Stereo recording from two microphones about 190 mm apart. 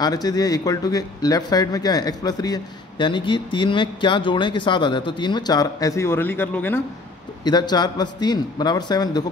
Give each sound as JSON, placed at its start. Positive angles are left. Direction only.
{"t": 0.0, "sound": "speech", "side_deg": 20}
{"t": 7.4, "sound": "speech", "side_deg": 20}